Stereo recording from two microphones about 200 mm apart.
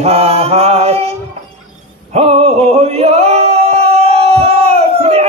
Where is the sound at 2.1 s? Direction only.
30° right (ahead or behind).